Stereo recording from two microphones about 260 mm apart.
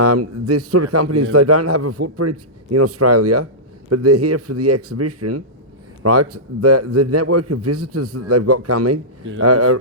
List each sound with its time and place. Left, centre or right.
0.0 s a man's voice: right